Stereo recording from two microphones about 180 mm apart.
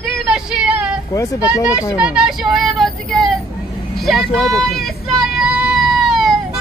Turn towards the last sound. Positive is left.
turn(degrees=0)  # may be behind; listen again after turning